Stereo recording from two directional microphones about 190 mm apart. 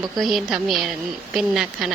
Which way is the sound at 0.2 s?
Centre (ahead or behind).